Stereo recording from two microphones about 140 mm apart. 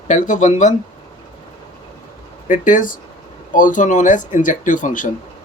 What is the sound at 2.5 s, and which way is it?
Speech, 70° left (ahead or behind).